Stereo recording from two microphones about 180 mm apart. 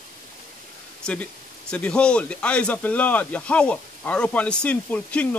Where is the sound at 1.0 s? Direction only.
5° left (ahead or behind).